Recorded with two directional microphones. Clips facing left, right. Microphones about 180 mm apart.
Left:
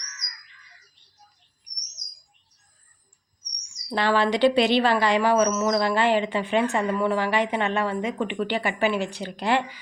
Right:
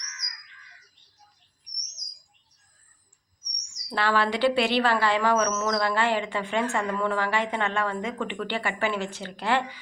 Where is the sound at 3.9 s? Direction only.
20° left (ahead or behind).